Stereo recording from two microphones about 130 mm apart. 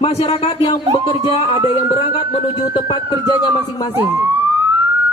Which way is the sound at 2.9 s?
35° left (ahead or behind).